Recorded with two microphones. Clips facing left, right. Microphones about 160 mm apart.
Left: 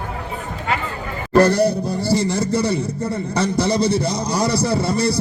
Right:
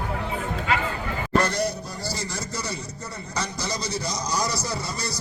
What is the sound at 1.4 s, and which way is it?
Music, 60° left (ahead or behind).